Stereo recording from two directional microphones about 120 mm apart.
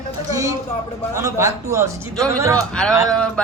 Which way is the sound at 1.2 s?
25° right (ahead or behind).